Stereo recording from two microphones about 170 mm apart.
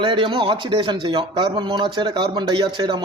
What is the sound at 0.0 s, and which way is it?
Speech, 30° right (ahead or behind).